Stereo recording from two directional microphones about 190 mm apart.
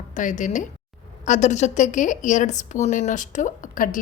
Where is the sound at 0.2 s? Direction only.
40° left (ahead or behind).